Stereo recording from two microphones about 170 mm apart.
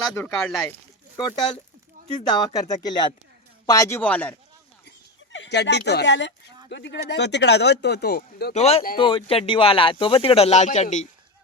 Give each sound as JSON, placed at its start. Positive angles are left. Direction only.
{"t": 0.1, "sound": "a man's voice", "side_deg": 15}
{"t": 1.1, "sound": "a man's voice", "side_deg": 25}
{"t": 4.9, "sound": "a sound", "side_deg": 90}
{"t": 6.7, "sound": "speech", "side_deg": 90}
{"t": 8.5, "sound": "speech", "side_deg": 35}